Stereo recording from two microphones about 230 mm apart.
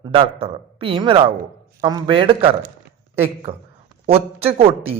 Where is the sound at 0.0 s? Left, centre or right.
Right.